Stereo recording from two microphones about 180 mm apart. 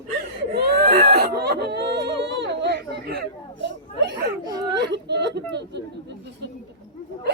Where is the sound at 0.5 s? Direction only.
55° right (ahead or behind); by 4.2 s 75° right (ahead or behind).